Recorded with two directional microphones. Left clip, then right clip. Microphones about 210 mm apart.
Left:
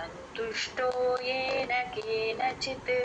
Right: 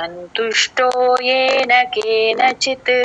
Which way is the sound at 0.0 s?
45° right (ahead or behind).